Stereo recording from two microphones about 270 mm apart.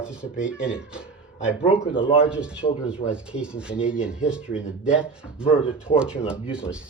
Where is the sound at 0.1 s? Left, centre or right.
Centre.